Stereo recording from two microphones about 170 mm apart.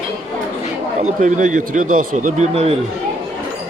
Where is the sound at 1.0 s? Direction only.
45° right (ahead or behind).